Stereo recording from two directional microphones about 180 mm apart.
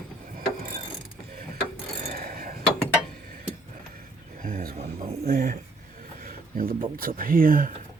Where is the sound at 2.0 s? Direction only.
55° right (ahead or behind).